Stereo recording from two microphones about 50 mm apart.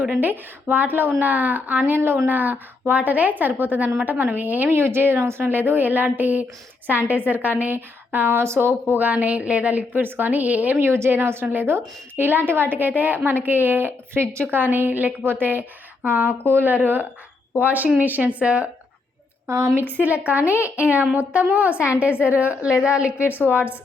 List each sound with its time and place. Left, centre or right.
0.2 s a woman's voice: right
2.0 s a woman's voice: right
4.7 s speech: right
5.4 s a woman's voice: right
9.0 s a woman's voice: right
10.8 s a woman's voice: right
17.7 s a woman's voice: right
19.5 s a woman's voice: right
20.0 s a woman's voice: right
23.3 s a woman's voice: right